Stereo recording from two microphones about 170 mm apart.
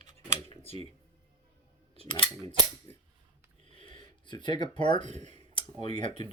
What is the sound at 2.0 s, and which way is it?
Speech, 25° left (ahead or behind).